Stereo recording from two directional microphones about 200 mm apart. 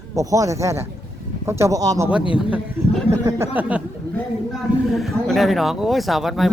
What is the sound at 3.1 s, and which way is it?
Speech, 15° right (ahead or behind).